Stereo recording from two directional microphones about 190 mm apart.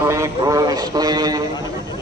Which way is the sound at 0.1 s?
15° right (ahead or behind).